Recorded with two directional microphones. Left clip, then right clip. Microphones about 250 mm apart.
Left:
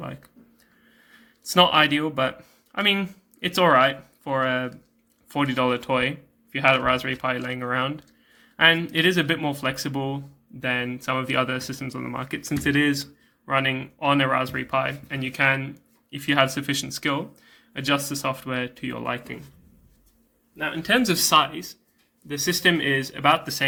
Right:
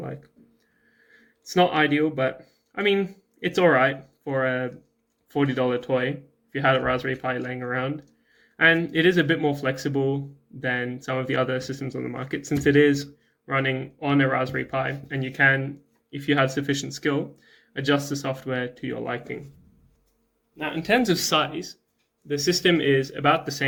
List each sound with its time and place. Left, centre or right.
1.5 s speech: left
20.6 s speech: centre
22.6 s speech: centre